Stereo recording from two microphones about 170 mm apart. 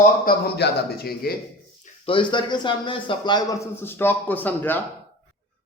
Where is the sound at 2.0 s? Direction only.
30° left (ahead or behind); by 4.8 s 10° left (ahead or behind).